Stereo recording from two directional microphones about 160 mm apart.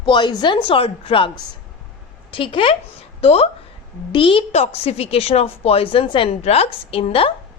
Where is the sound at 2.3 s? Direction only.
30° left (ahead or behind).